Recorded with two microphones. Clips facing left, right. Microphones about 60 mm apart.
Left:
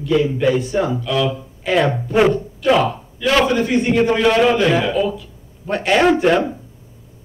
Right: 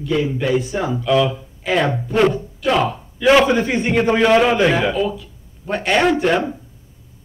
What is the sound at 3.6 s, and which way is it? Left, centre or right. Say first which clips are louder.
A man's voice: left 2 dB; centre.